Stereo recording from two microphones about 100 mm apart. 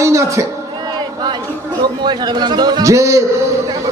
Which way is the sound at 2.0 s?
45° right (ahead or behind).